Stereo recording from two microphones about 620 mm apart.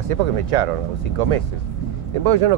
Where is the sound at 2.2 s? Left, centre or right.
Right.